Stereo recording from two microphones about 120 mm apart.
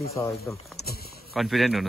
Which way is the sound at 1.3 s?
Centre (ahead or behind).